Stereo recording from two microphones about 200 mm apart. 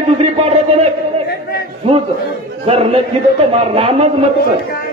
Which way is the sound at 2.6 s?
30° right (ahead or behind).